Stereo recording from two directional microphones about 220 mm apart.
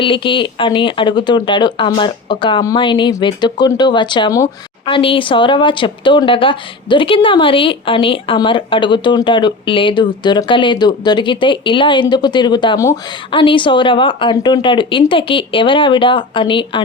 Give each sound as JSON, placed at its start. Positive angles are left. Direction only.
{"t": 0.0, "sound": "a woman's voice", "side_deg": 25}